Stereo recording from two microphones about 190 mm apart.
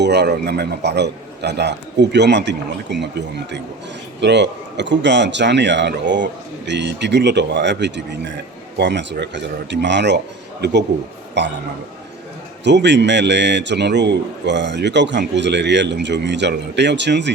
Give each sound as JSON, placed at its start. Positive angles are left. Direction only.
{"t": 0.0, "sound": "a man's voice", "side_deg": -60}
{"t": 12.6, "sound": "a man's voice", "side_deg": -65}